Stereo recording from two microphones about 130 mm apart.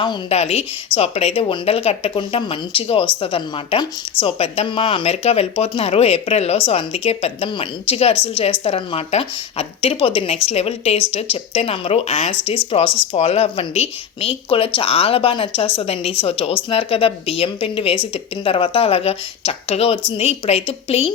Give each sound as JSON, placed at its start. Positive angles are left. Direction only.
{"t": 0.3, "sound": "speech", "side_deg": 50}